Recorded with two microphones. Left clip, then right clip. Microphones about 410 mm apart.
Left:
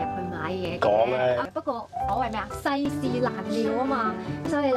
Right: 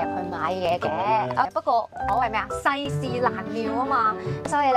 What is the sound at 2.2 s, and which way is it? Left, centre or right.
Speech, right.